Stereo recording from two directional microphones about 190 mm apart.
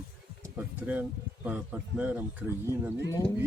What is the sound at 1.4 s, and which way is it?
Speech, 5° right (ahead or behind).